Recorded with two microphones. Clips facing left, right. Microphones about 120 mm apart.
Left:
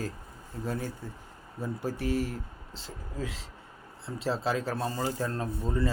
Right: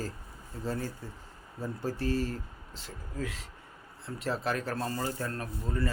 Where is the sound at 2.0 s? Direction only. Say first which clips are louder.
Left 1 dB; 75° left (ahead or behind).